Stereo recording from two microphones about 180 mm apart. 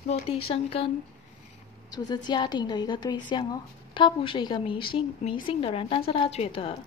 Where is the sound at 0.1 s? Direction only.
30° left (ahead or behind).